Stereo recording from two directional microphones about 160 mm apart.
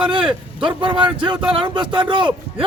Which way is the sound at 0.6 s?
30° right (ahead or behind).